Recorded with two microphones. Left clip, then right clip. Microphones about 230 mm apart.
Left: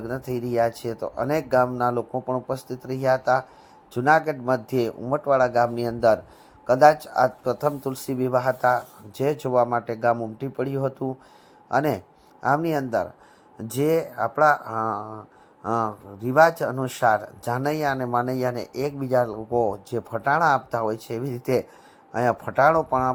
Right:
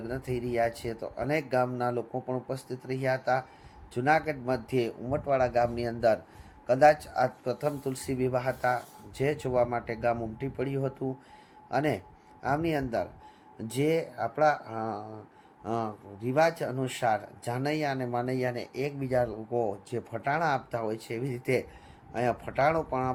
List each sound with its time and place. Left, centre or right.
0.1 s speech: centre